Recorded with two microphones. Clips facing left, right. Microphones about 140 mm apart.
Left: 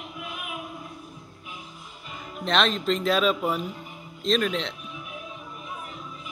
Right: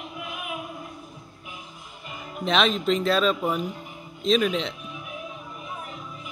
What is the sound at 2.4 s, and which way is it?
Speech, centre (ahead or behind).